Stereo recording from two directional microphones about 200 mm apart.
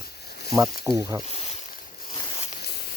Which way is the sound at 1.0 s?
15° right (ahead or behind).